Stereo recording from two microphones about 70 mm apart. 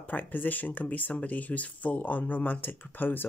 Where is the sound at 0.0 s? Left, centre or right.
Left.